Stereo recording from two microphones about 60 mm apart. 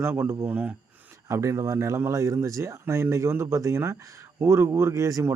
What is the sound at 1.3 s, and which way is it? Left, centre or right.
Speech, right.